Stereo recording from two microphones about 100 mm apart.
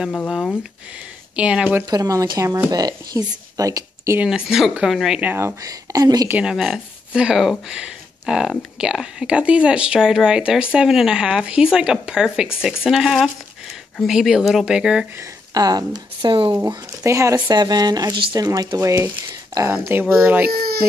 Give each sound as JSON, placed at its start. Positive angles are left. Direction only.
{"t": 1.3, "sound": "speech", "side_deg": -10}
{"t": 1.9, "sound": "speech", "side_deg": -35}
{"t": 4.2, "sound": "speech", "side_deg": -5}
{"t": 5.2, "sound": "speech", "side_deg": -20}
{"t": 5.6, "sound": "speech", "side_deg": -35}
{"t": 6.4, "sound": "speech", "side_deg": 0}
{"t": 15.5, "sound": "speech", "side_deg": -40}
{"t": 16.6, "sound": "speech", "side_deg": -30}
{"t": 17.5, "sound": "speech", "side_deg": -45}
{"t": 19.7, "sound": "speech", "side_deg": -20}